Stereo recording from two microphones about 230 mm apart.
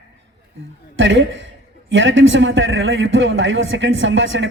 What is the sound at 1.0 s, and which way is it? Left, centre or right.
A man's voice, right.